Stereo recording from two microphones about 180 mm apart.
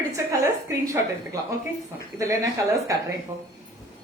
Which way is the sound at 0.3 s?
15° right (ahead or behind).